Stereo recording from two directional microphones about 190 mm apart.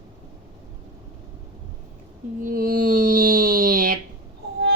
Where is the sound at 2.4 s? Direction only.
45° right (ahead or behind).